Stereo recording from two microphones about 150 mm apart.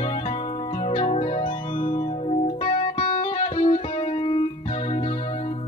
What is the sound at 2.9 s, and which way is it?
Music, 50° left (ahead or behind).